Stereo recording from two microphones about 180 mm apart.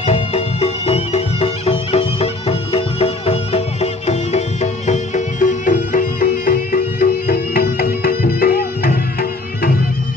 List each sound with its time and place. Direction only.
0.0 s music: 35° left (ahead or behind); by 9.7 s 55° left (ahead or behind)